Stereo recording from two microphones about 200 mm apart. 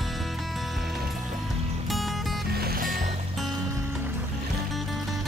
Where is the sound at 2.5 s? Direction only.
50° right (ahead or behind).